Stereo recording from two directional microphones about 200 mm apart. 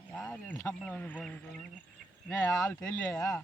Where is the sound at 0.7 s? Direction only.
10° left (ahead or behind).